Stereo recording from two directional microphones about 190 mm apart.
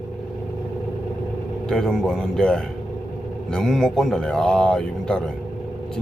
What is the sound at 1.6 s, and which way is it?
Speech, 5° left (ahead or behind).